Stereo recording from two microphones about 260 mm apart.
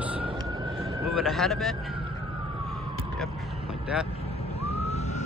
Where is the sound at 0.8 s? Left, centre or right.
Centre.